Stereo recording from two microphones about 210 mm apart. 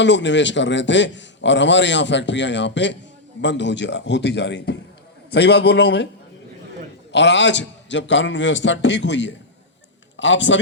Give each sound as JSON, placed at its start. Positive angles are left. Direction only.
{"t": 0.0, "sound": "a man's voice", "side_deg": 60}
{"t": 7.1, "sound": "a man's voice", "side_deg": 55}